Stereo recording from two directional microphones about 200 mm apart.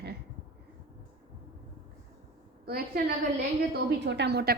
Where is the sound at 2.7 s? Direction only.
50° right (ahead or behind).